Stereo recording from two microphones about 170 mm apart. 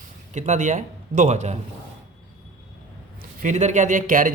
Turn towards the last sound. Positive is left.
turn(degrees=-50)  # may be behind; listen again after turning